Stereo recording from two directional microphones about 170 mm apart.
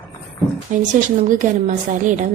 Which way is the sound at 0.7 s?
45° right (ahead or behind).